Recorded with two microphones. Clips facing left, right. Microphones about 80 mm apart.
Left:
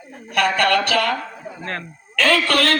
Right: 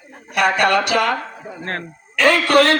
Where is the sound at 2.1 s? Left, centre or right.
Centre.